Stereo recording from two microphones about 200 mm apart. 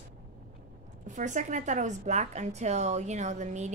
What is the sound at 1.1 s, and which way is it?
A woman's voice, 40° right (ahead or behind).